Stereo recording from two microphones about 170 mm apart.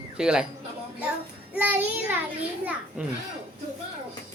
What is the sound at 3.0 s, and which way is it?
Speech, 10° right (ahead or behind).